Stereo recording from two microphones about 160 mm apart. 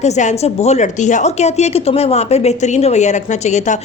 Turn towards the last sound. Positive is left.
turn(degrees=45)  # may be behind; listen again after turning